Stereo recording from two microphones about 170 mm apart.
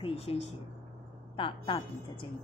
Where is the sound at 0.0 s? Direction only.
35° left (ahead or behind).